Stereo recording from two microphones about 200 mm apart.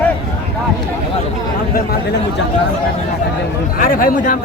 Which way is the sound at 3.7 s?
45° left (ahead or behind).